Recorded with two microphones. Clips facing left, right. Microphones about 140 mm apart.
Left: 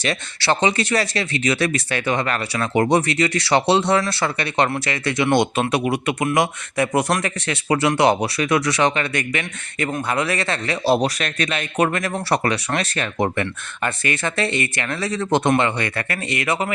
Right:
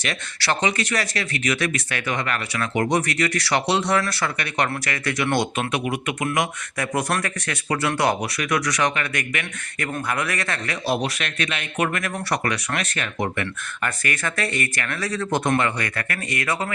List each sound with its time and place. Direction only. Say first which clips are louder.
0.0 s speech: left 5 dB; 30° left (ahead or behind)